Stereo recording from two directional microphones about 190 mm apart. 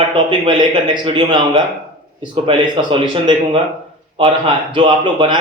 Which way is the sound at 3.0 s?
25° right (ahead or behind).